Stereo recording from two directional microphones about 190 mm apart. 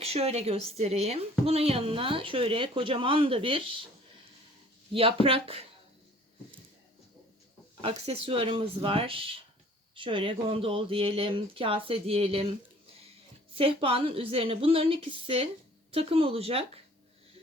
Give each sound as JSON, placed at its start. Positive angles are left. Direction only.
{"t": 0.0, "sound": "a woman's voice", "side_deg": -30}
{"t": 4.9, "sound": "speech", "side_deg": -30}
{"t": 7.8, "sound": "a woman's voice", "side_deg": -30}